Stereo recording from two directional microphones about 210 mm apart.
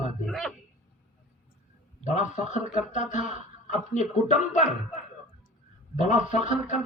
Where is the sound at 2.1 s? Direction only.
35° left (ahead or behind).